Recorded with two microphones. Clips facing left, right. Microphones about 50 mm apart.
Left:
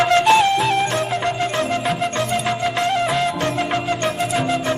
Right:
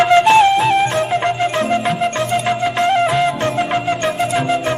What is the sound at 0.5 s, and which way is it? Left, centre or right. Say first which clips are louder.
Music: right 4 dB; centre.